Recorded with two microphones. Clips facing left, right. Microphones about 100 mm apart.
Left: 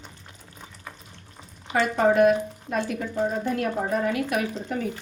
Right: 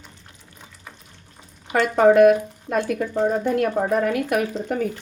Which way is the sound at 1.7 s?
60° right (ahead or behind).